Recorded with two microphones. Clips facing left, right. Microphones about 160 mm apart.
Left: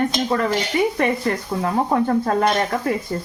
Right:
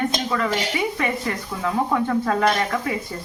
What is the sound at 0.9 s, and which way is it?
Speech, 45° left (ahead or behind).